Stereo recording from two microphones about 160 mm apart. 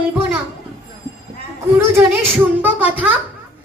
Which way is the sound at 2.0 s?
15° right (ahead or behind).